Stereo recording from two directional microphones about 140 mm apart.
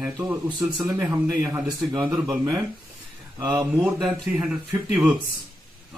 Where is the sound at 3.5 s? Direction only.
10° right (ahead or behind).